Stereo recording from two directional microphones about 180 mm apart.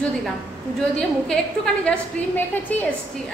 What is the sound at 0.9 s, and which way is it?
A woman's voice, 5° left (ahead or behind).